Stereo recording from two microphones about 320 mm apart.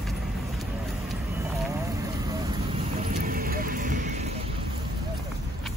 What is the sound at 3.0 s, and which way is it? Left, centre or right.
Vehicle, right.